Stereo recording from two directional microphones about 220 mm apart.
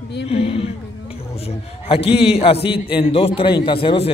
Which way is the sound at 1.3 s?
25° left (ahead or behind).